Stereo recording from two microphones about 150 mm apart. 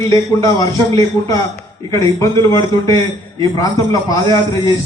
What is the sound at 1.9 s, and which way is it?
A man's voice, 20° left (ahead or behind).